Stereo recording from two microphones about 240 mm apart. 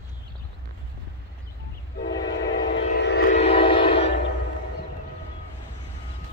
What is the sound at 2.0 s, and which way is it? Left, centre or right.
Train, left.